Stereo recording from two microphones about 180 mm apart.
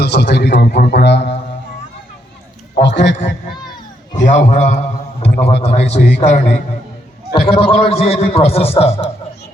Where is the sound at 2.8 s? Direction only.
85° left.